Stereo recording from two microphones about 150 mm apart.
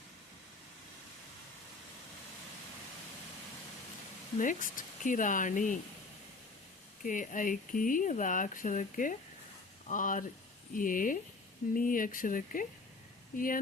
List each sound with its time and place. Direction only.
4.4 s speech: 60° left (ahead or behind)
7.0 s speech: 60° left (ahead or behind)